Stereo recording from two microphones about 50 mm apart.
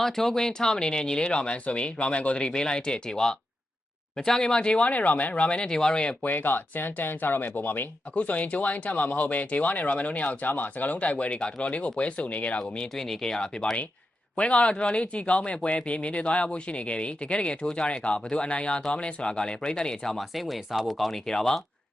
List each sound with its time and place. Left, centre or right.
0.0 s speech: centre
6.2 s speech: left
8.1 s speech: left
12.8 s speech: centre
14.3 s speech: left
20.1 s speech: centre